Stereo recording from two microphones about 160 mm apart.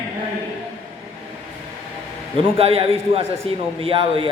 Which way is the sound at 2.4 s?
35° right (ahead or behind).